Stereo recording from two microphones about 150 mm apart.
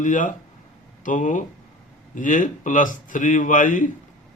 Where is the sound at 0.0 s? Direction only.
60° left (ahead or behind).